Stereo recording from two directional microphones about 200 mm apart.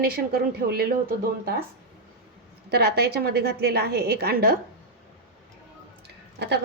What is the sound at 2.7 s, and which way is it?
A woman's voice, 50° right (ahead or behind).